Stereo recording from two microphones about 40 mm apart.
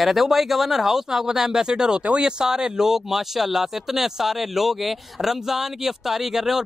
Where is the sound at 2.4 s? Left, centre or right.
Centre.